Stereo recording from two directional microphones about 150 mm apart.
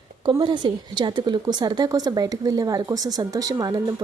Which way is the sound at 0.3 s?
30° right (ahead or behind).